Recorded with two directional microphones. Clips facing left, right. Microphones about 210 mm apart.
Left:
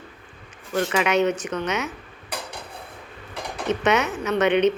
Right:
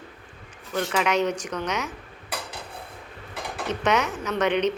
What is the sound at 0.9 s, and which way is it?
Speech, 5° left (ahead or behind).